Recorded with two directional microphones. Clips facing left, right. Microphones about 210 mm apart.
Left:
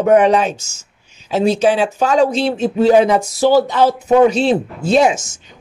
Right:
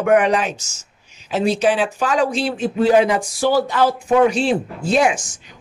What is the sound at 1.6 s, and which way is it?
Speech, 40° left (ahead or behind).